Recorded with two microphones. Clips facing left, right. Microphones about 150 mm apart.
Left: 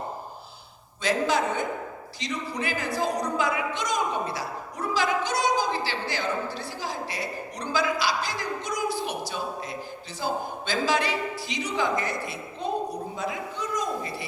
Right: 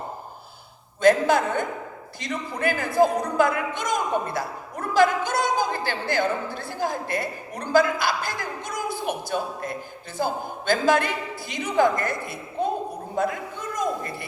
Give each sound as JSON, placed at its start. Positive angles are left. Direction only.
{"t": 1.0, "sound": "a man's voice", "side_deg": -50}